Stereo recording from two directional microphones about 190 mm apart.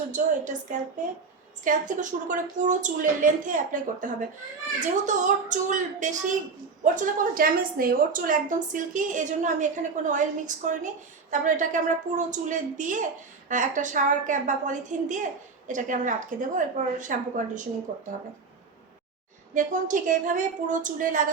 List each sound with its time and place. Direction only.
0.1 s a woman's voice: 40° right (ahead or behind)
19.5 s a woman's voice: 45° right (ahead or behind)